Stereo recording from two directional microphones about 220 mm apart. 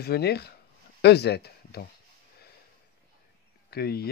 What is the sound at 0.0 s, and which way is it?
Speech, 45° left (ahead or behind).